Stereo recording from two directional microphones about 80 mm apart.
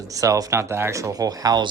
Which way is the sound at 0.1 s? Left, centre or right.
Right.